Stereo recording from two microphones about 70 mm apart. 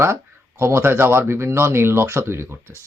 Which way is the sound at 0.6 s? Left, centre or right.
Right.